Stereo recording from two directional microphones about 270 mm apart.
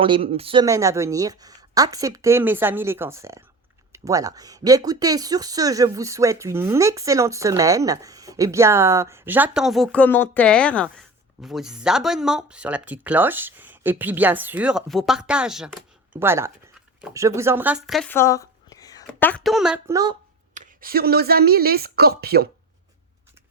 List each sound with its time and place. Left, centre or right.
0.0 s a woman's voice: right
20.5 s a woman's voice: right